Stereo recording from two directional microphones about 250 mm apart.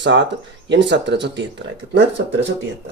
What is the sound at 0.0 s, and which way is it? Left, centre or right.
Speech, right.